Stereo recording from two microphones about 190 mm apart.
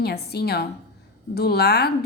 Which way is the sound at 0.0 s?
55° left (ahead or behind).